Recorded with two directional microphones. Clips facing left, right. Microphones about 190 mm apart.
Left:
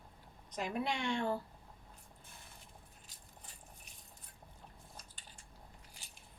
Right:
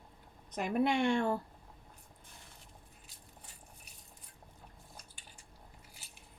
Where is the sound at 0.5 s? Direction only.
55° right (ahead or behind).